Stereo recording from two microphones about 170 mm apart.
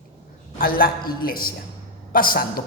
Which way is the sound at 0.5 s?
60° left (ahead or behind).